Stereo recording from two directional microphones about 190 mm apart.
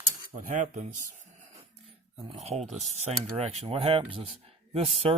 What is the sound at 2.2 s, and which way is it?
Speech, 35° right (ahead or behind).